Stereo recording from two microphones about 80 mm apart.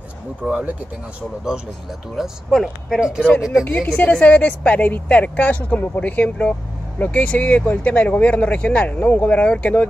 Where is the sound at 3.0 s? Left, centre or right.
Centre.